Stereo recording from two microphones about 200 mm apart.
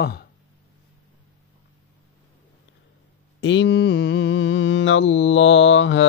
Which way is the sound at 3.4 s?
65° left (ahead or behind).